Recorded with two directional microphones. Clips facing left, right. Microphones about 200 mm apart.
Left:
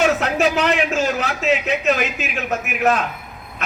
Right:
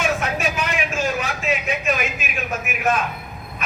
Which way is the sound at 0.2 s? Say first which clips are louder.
Left 6 dB; 75° left (ahead or behind).